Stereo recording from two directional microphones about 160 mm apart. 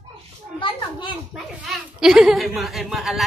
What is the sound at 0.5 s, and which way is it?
Speech, 30° left (ahead or behind).